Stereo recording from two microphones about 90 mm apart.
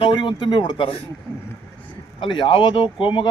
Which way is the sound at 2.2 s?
65° left (ahead or behind).